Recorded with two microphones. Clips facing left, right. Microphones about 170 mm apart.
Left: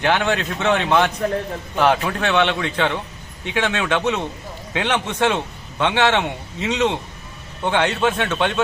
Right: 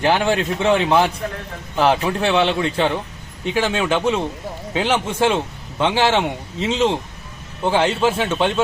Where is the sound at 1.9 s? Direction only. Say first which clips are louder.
Right 2 dB; 25° right (ahead or behind).